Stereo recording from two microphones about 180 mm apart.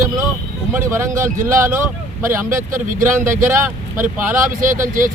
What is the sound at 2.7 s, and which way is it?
Speech, 50° right (ahead or behind).